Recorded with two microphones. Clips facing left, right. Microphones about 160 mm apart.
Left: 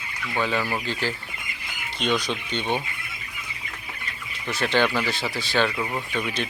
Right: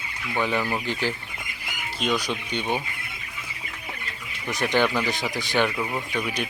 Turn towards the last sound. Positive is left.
turn(degrees=-10)  # may be behind; listen again after turning